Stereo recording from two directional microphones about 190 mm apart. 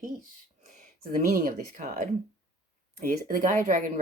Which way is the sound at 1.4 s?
45° right (ahead or behind).